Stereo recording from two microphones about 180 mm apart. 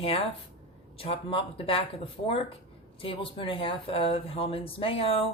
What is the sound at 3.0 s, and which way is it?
Speech, 30° left (ahead or behind).